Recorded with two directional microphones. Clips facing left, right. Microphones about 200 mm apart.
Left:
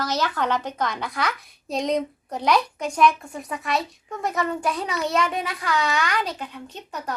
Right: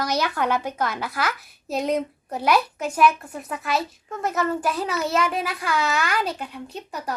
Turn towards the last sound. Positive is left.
turn(degrees=-10)  # may be behind; listen again after turning